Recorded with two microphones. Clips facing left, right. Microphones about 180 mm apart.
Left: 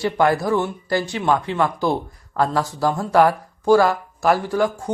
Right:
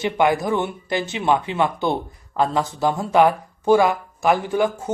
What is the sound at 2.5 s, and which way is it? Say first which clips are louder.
Speech: even; 20° right (ahead or behind).